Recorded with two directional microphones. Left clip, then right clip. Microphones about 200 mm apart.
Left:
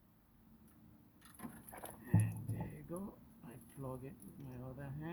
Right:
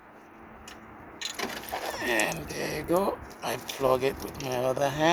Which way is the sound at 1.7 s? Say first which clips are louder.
Right 17 dB; 20° right (ahead or behind).